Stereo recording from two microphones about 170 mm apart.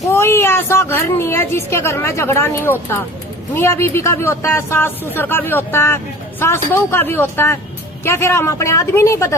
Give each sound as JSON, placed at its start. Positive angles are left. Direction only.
{"t": 0.1, "sound": "a woman's voice", "side_deg": 15}